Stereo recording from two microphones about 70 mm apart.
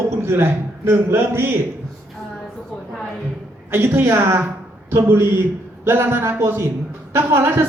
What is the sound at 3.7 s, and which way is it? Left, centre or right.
A man's voice, right.